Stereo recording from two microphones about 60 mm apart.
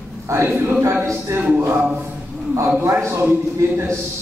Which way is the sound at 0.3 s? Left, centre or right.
Right.